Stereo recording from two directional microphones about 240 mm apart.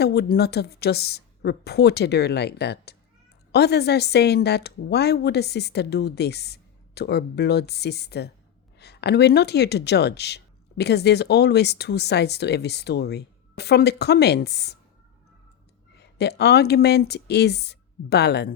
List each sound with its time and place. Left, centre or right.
0.0 s speech: left
16.0 s speech: left